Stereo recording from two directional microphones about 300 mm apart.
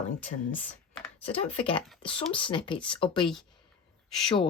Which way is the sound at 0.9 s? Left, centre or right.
Centre.